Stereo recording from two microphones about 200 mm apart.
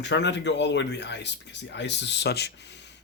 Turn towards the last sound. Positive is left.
turn(degrees=60)  # may be behind; listen again after turning